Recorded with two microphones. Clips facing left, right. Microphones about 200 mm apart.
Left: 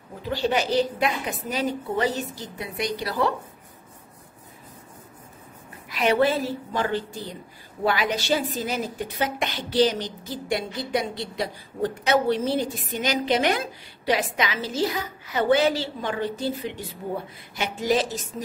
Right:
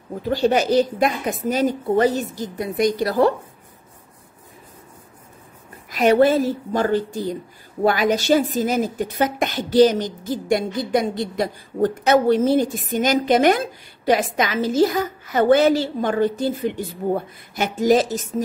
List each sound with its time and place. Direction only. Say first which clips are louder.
0.3 s a woman's voice: right 6 dB; 45° right (ahead or behind)
5.9 s a woman's voice: right 6 dB; 45° right (ahead or behind)